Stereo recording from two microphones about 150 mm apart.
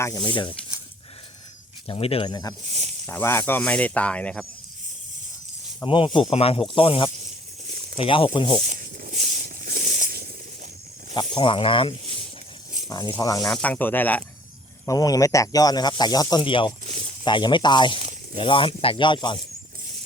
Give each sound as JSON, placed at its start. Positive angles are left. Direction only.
{"t": 0.0, "sound": "speech", "side_deg": 25}
{"t": 1.9, "sound": "speech", "side_deg": 40}
{"t": 3.1, "sound": "speech", "side_deg": 15}
{"t": 5.8, "sound": "speech", "side_deg": 35}
{"t": 8.6, "sound": "a sound", "side_deg": -65}
{"t": 11.1, "sound": "speech", "side_deg": 30}
{"t": 13.5, "sound": "speech", "side_deg": 10}
{"t": 14.8, "sound": "speech", "side_deg": 25}
{"t": 16.8, "sound": "a sound", "side_deg": -50}
{"t": 17.2, "sound": "speech", "side_deg": 30}